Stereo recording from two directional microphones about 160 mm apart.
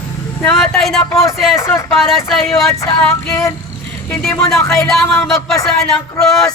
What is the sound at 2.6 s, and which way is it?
Female singing, 20° left (ahead or behind).